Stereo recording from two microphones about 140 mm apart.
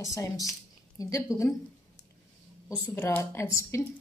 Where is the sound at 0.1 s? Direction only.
25° left (ahead or behind).